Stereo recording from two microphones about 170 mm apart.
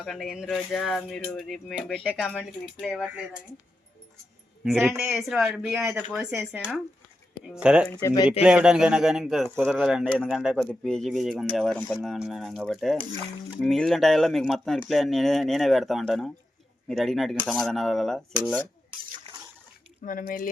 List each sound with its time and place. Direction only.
0.0 s speech: centre (ahead or behind)
4.6 s speech: centre (ahead or behind)
8.0 s speech: 25° left (ahead or behind)
8.3 s speech: 10° right (ahead or behind)
20.0 s speech: 55° left (ahead or behind)